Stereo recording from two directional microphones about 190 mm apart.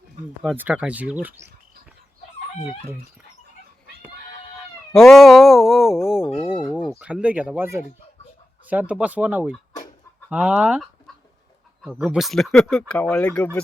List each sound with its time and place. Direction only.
0.4 s speech: 5° right (ahead or behind)
4.9 s a sound: centre (ahead or behind)
6.2 s speech: 10° left (ahead or behind)
6.5 s speech: 5° right (ahead or behind)